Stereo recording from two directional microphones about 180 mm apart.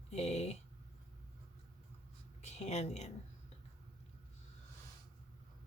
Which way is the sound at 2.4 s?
40° left (ahead or behind).